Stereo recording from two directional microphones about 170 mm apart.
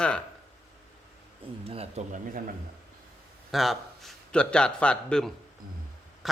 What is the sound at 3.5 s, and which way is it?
A man's voice, centre (ahead or behind).